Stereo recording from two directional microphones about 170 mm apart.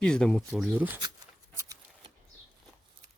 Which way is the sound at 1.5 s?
20° right (ahead or behind).